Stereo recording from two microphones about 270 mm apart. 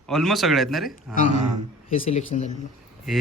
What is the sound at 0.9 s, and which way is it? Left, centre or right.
A man's voice, left.